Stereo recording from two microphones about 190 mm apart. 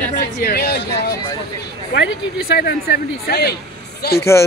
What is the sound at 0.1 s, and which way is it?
Speech, 55° left (ahead or behind).